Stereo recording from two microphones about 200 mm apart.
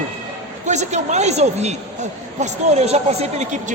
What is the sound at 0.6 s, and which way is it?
A man's voice, 35° right (ahead or behind).